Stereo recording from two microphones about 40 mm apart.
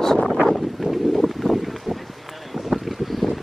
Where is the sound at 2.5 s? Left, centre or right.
Centre.